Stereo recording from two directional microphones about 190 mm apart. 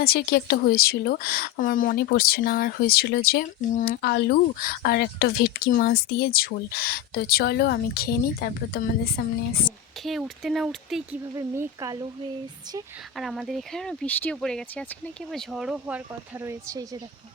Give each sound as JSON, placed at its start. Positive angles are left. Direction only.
{"t": 0.0, "sound": "speech", "side_deg": 55}
{"t": 10.0, "sound": "speech", "side_deg": 0}
{"t": 11.3, "sound": "speech", "side_deg": -15}
{"t": 13.1, "sound": "speech", "side_deg": 0}